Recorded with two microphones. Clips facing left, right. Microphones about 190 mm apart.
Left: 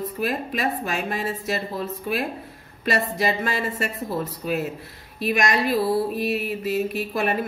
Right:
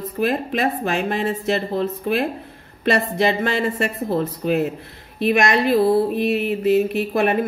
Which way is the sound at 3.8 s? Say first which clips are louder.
Right 6 dB; 55° right (ahead or behind).